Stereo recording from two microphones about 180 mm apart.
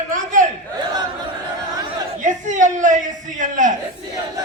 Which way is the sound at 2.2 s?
45° right (ahead or behind).